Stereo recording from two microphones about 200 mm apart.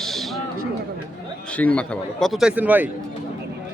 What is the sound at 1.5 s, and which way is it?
A man's voice, 5° left (ahead or behind).